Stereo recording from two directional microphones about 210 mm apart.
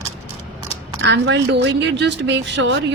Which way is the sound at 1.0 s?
55° right (ahead or behind).